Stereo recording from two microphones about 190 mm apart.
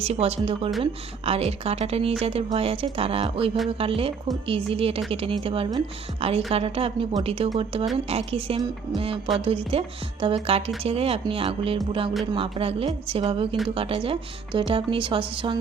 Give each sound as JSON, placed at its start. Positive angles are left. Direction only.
{"t": 0.0, "sound": "speech", "side_deg": -30}